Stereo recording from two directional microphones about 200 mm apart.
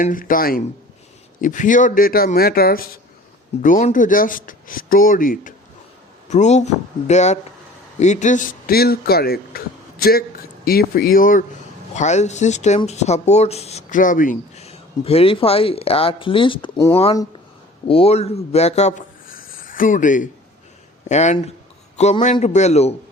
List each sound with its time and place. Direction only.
0.0 s speech: 45° left (ahead or behind); by 17.0 s 15° left (ahead or behind)
17.8 s speech: 30° left (ahead or behind)
19.5 s a sound: 45° left (ahead or behind)
21.1 s speech: 35° left (ahead or behind)